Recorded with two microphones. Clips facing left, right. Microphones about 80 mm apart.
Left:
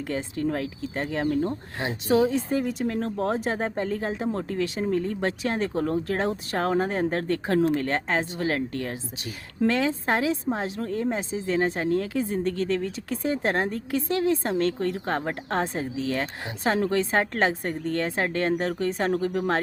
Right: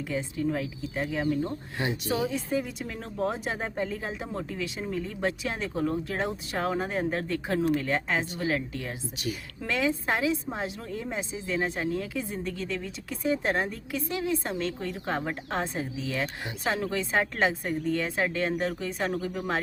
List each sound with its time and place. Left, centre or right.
0.1 s speech: left
2.0 s speech: left
2.5 s speech: left
16.2 s speech: left
16.8 s speech: left